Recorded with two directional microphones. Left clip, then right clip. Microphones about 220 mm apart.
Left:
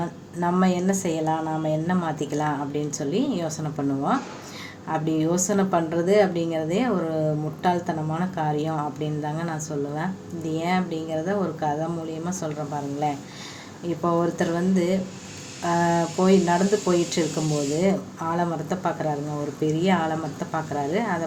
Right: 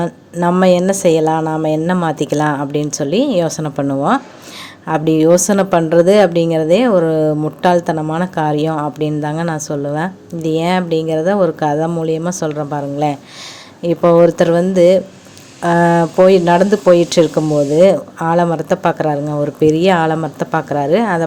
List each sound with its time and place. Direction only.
0.0 s speech: 45° right (ahead or behind)